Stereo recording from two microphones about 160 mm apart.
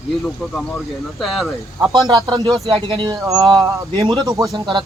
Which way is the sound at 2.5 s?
Centre (ahead or behind).